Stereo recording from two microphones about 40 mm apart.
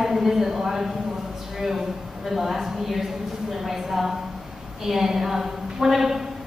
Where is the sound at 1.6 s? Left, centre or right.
Centre.